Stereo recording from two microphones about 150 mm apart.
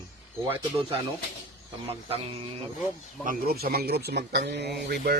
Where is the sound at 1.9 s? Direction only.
40° right (ahead or behind).